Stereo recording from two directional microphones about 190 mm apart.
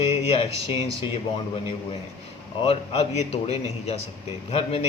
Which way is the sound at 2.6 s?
30° left (ahead or behind).